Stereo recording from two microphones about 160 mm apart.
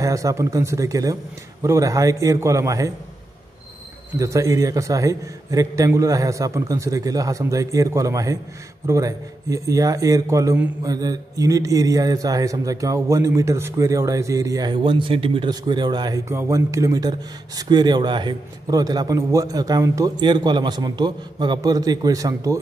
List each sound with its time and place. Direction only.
0.0 s a man's voice: 20° right (ahead or behind)
4.2 s a man's voice: 20° right (ahead or behind)